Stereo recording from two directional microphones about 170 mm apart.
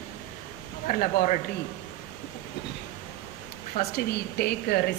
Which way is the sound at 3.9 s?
70° left (ahead or behind).